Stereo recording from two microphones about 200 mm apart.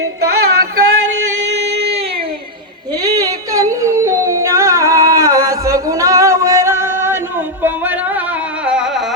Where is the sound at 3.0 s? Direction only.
20° right (ahead or behind).